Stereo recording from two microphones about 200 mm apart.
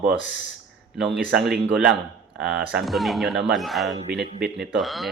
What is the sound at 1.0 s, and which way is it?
Speech, 5° right (ahead or behind).